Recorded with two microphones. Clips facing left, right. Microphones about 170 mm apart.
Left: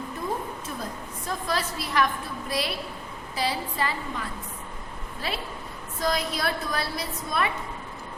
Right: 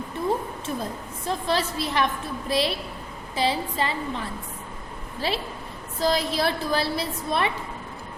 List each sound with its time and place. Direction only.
1.3 s a woman's voice: 25° right (ahead or behind)